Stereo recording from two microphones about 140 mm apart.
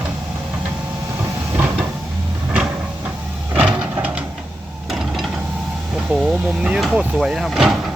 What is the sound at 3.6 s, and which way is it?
Printer, 10° right (ahead or behind).